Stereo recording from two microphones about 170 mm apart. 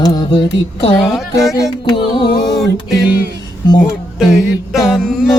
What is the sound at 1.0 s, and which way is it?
Speech, centre (ahead or behind).